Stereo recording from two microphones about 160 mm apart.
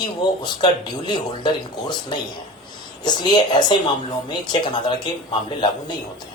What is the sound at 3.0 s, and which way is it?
Speech, 30° left (ahead or behind).